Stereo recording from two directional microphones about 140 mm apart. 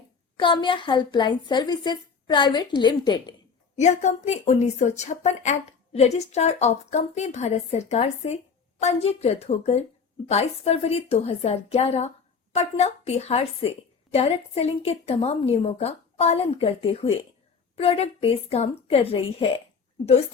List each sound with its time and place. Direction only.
0.3 s a woman's voice: 35° left (ahead or behind)
3.8 s a woman's voice: 55° left (ahead or behind); by 19.6 s 40° left (ahead or behind)